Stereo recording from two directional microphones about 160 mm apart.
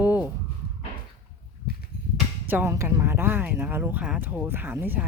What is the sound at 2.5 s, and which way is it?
Speech, 15° right (ahead or behind).